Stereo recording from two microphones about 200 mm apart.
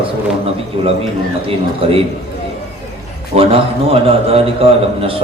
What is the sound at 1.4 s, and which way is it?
Speech, 30° right (ahead or behind).